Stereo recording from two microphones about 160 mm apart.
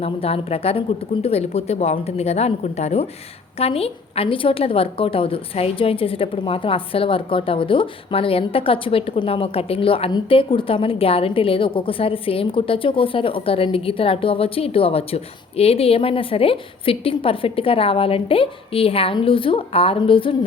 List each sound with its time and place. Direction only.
0.0 s a woman's voice: 35° left (ahead or behind)